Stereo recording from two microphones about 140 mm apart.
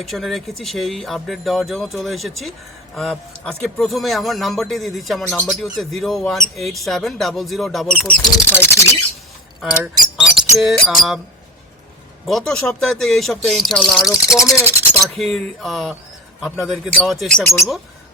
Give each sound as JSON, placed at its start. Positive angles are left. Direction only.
{"t": 0.0, "sound": "speech", "side_deg": 0}
{"t": 9.8, "sound": "speech", "side_deg": -5}
{"t": 12.2, "sound": "speech", "side_deg": 0}
{"t": 14.0, "sound": "speech", "side_deg": 25}
{"t": 15.0, "sound": "speech", "side_deg": 0}